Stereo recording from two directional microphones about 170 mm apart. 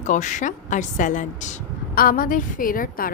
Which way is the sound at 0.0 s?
45° left (ahead or behind).